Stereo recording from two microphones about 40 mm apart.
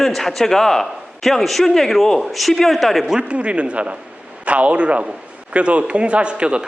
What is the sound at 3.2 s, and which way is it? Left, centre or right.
A man's voice, right.